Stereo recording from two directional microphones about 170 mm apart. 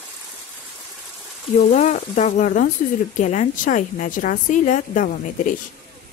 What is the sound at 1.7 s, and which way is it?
A woman's voice, 45° left (ahead or behind).